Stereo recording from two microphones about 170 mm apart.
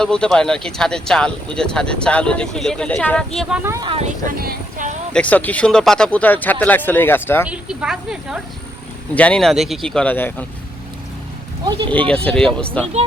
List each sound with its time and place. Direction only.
0.0 s speech: 5° left (ahead or behind)
3.6 s speech: 15° right (ahead or behind)
3.8 s speech: 35° right (ahead or behind)
4.4 s speech: 60° right (ahead or behind)
5.1 s speech: 10° left (ahead or behind)
7.4 s speech: 5° right (ahead or behind)
9.1 s speech: 5° left (ahead or behind)
11.9 s speech: 5° left (ahead or behind)